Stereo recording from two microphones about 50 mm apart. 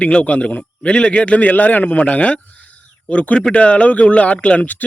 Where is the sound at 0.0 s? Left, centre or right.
Left.